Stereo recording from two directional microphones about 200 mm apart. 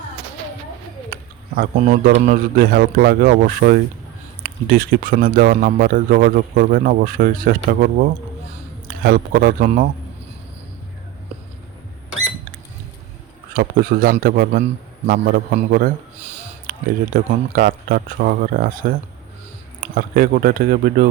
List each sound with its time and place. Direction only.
1.1 s a man's voice: 45° right (ahead or behind)
13.5 s a man's voice: 45° right (ahead or behind)